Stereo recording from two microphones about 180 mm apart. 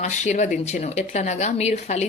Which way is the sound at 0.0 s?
40° left (ahead or behind).